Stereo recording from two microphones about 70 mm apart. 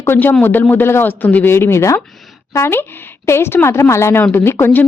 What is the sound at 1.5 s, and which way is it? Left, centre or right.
A woman's voice, left.